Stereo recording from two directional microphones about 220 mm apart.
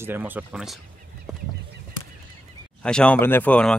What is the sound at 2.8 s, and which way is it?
Speech, 5° left (ahead or behind).